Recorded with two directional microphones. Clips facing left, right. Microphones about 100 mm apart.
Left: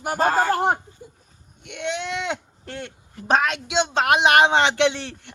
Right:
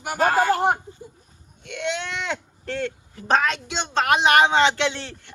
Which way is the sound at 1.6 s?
15° left (ahead or behind).